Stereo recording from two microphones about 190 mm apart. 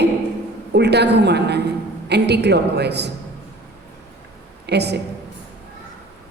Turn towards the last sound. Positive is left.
turn(degrees=-60)  # may be behind; listen again after turning